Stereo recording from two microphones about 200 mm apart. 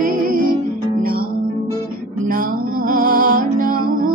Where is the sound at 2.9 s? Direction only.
45° right (ahead or behind).